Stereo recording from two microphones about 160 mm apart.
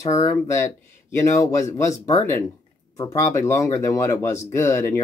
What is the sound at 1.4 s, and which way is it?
Speech, 20° left (ahead or behind).